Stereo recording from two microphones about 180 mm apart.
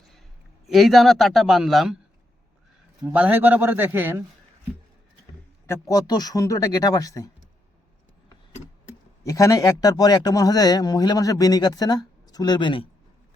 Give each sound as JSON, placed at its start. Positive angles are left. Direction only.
{"t": 0.7, "sound": "a man's voice", "side_deg": 0}
{"t": 3.0, "sound": "a man's voice", "side_deg": -10}
{"t": 5.6, "sound": "a man's voice", "side_deg": 15}
{"t": 9.2, "sound": "a man's voice", "side_deg": 20}